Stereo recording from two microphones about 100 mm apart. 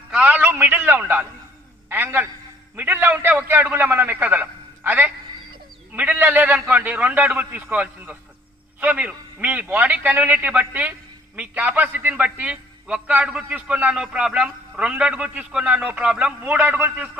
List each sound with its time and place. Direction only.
0.1 s a man's voice: 15° right (ahead or behind)